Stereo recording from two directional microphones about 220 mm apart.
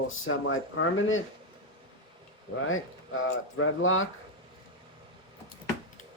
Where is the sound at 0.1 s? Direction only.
65° left (ahead or behind).